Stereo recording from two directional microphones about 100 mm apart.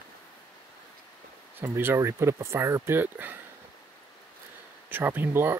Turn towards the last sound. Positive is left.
turn(degrees=-20)  # may be behind; listen again after turning